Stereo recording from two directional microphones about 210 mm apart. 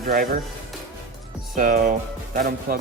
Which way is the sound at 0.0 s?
45° right (ahead or behind).